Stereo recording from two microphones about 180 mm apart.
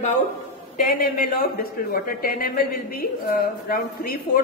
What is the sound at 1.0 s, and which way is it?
A woman's voice, 55° left (ahead or behind).